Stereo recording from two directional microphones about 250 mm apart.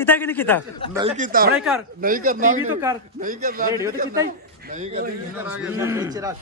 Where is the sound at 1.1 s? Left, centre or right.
Right.